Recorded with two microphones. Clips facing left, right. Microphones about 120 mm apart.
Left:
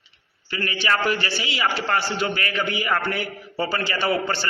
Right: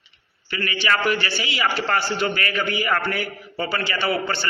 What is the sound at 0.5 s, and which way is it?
A man's voice, 35° left (ahead or behind).